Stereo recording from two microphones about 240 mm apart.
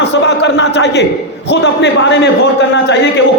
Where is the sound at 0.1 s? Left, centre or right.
Left.